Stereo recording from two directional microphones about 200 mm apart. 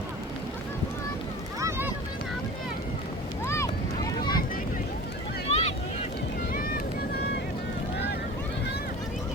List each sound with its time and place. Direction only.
3.4 s boat: 15° left (ahead or behind)
5.5 s boat: 30° left (ahead or behind)
6.5 s vehicle: 45° left (ahead or behind)